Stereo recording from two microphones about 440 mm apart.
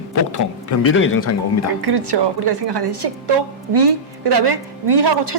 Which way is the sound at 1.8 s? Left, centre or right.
Right.